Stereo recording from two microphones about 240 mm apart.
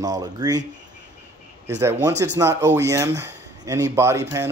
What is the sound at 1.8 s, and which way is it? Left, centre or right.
Speech, centre.